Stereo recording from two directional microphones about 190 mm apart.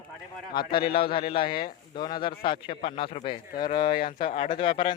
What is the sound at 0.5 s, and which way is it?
Speech, 25° left (ahead or behind).